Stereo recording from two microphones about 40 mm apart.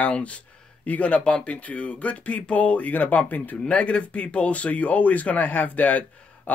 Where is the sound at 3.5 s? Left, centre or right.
Left.